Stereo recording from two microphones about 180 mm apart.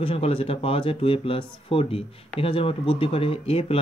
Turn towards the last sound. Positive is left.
turn(degrees=30)  # may be behind; listen again after turning